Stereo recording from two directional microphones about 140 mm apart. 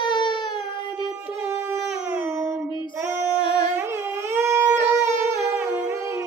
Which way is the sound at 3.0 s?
15° right (ahead or behind).